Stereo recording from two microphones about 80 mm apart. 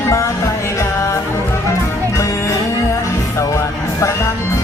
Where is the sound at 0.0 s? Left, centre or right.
Left.